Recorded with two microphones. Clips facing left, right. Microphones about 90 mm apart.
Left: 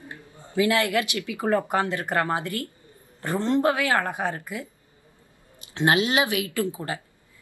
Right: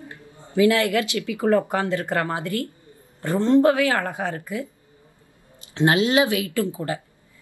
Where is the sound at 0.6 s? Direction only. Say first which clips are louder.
Right 4 dB; 20° left (ahead or behind).